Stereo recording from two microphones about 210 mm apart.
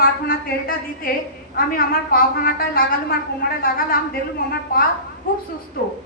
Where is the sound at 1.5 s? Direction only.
45° left (ahead or behind).